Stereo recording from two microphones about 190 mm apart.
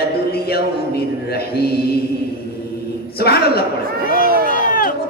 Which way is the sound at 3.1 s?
55° left (ahead or behind).